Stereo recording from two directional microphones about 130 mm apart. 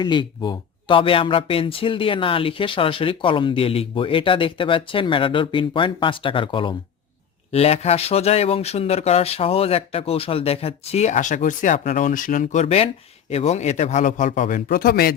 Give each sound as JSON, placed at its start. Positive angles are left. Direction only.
{"t": 0.0, "sound": "speech", "side_deg": 35}
{"t": 7.5, "sound": "a man's voice", "side_deg": 55}